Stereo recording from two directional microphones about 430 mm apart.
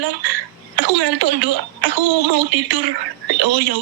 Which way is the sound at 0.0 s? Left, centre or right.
Right.